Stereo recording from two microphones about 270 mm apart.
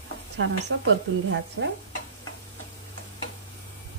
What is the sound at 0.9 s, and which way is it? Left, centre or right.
Speech, right.